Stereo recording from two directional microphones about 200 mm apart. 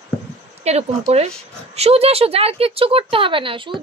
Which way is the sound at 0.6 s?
30° right (ahead or behind).